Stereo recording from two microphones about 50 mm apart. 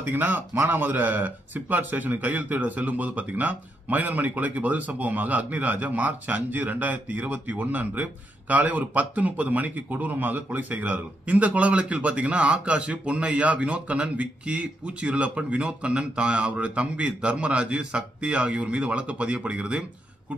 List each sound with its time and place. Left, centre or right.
0.0 s speech: right